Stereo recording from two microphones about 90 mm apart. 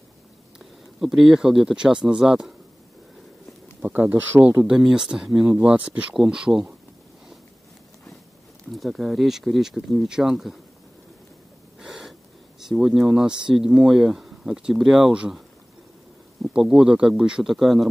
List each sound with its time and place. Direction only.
0.9 s speech: 5° right (ahead or behind)
3.8 s speech: 20° right (ahead or behind)
8.7 s speech: centre (ahead or behind)
11.8 s gasp: centre (ahead or behind)
12.5 s speech: 5° right (ahead or behind)
16.4 s speech: 10° right (ahead or behind)